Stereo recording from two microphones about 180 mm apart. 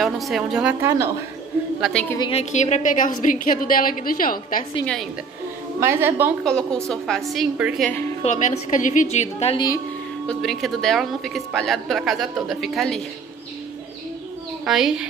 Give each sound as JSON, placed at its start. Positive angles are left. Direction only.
{"t": 0.0, "sound": "a woman's voice", "side_deg": 0}
{"t": 0.8, "sound": "a woman's voice", "side_deg": -15}
{"t": 1.8, "sound": "a woman's voice", "side_deg": 5}
{"t": 2.1, "sound": "a woman's voice", "side_deg": 25}
{"t": 2.5, "sound": "a woman's voice", "side_deg": 40}
{"t": 5.8, "sound": "a woman's voice", "side_deg": -15}
{"t": 6.4, "sound": "a woman's voice", "side_deg": 5}
{"t": 8.2, "sound": "a woman's voice", "side_deg": 40}
{"t": 10.2, "sound": "a woman's voice", "side_deg": 0}
{"t": 14.6, "sound": "a woman's voice", "side_deg": -5}